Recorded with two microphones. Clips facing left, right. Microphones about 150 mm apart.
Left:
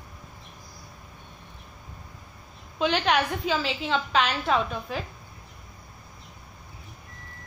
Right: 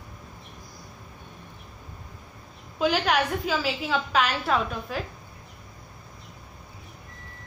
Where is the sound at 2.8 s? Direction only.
5° right (ahead or behind).